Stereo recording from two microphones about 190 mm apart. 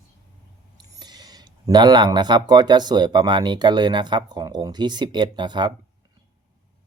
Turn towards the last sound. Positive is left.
turn(degrees=-25)  # may be behind; listen again after turning